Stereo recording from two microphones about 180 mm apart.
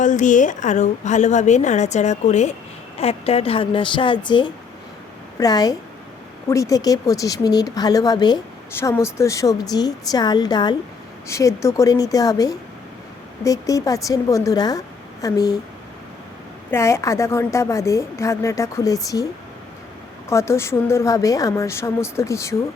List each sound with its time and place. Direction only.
0.0 s a woman's voice: 45° left (ahead or behind); by 15.5 s 20° left (ahead or behind)
16.7 s a woman's voice: 15° left (ahead or behind)
20.3 s a woman's voice: 15° left (ahead or behind)